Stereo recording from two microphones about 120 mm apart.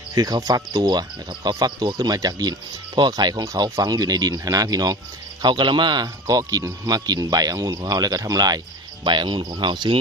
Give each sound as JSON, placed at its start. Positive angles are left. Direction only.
{"t": 0.1, "sound": "speech", "side_deg": -30}